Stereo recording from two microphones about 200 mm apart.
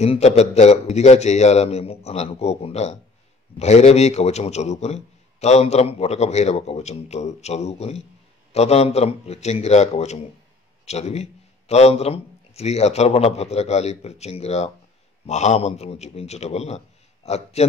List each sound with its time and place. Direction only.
0.0 s a man's voice: 30° left (ahead or behind)